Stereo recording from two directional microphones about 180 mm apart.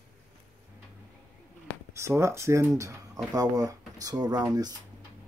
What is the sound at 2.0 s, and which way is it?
Speech, 15° right (ahead or behind).